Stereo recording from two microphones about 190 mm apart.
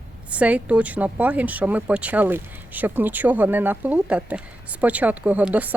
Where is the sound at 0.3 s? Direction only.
5° right (ahead or behind).